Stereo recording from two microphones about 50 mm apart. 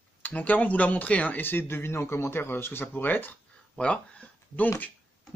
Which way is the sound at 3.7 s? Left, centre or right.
Left.